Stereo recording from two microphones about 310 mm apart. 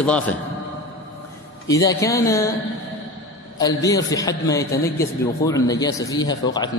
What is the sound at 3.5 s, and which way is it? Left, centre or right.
Speech, centre.